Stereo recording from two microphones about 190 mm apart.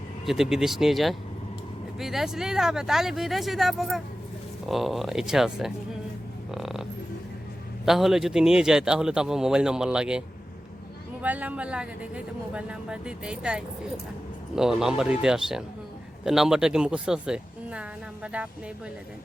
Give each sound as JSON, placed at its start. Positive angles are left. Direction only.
{"t": 0.3, "sound": "speech", "side_deg": 0}
{"t": 6.5, "sound": "a sound", "side_deg": 0}
{"t": 7.9, "sound": "speech", "side_deg": 0}